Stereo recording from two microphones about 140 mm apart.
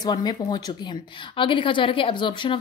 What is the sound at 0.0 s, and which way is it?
A woman's voice, 30° left (ahead or behind).